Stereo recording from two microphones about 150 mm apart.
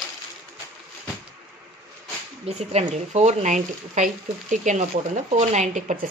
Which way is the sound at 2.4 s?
45° right (ahead or behind).